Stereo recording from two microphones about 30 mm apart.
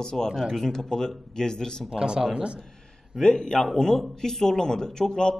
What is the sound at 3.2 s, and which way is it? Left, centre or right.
A man's voice, centre.